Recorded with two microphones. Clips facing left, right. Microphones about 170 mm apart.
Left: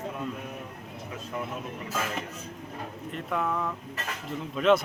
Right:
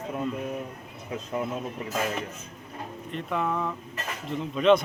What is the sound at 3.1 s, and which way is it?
Speech, centre (ahead or behind).